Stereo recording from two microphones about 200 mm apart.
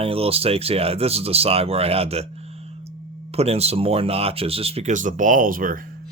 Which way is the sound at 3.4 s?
30° right (ahead or behind).